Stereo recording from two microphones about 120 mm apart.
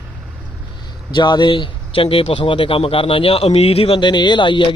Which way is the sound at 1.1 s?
40° left (ahead or behind).